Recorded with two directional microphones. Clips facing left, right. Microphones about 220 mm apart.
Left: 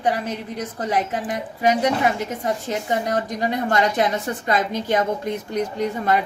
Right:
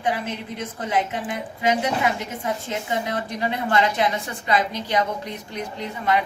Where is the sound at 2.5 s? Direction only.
45° left (ahead or behind).